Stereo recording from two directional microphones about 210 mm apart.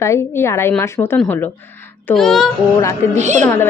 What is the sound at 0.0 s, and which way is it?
A woman's voice, 15° left (ahead or behind).